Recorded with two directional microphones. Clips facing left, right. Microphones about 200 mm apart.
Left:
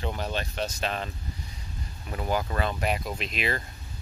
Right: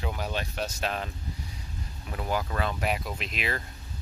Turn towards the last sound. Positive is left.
turn(degrees=0)  # may be behind; listen again after turning